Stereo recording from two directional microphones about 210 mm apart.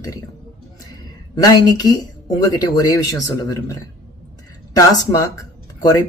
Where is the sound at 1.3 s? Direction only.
20° left (ahead or behind).